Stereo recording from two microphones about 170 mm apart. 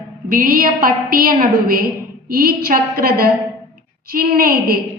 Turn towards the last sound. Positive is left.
turn(degrees=-60)  # may be behind; listen again after turning